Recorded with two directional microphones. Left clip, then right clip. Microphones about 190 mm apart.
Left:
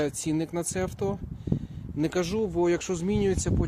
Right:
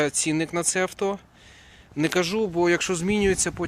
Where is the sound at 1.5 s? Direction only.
Centre (ahead or behind).